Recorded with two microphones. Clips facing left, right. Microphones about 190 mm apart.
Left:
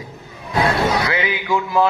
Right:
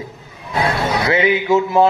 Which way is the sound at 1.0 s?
25° right (ahead or behind).